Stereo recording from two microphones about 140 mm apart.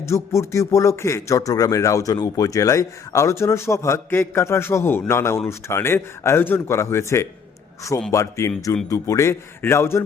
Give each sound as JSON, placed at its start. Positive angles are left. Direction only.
{"t": 0.0, "sound": "a man's voice", "side_deg": 20}